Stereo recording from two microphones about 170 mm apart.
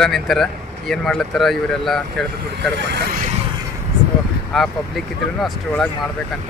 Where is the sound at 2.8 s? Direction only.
80° right.